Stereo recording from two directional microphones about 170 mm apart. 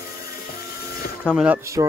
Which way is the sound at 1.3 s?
10° left (ahead or behind).